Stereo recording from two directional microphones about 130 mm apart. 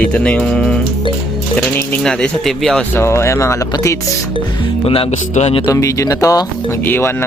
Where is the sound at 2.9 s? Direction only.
20° left (ahead or behind).